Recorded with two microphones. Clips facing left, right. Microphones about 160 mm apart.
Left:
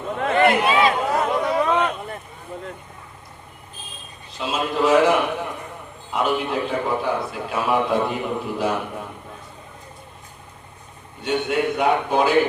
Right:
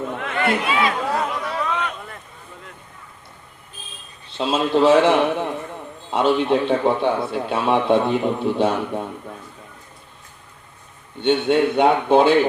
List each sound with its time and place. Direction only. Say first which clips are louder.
0.2 s chatter: left 7 dB; 35° left (ahead or behind)
1.6 s a sound: left 5 dB; 30° left (ahead or behind)
4.3 s a man's voice: right 5 dB; 30° right (ahead or behind)
11.2 s a man's voice: right 5 dB; 30° right (ahead or behind)